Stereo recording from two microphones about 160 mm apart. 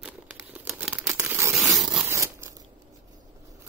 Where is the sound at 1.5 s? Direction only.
Centre (ahead or behind).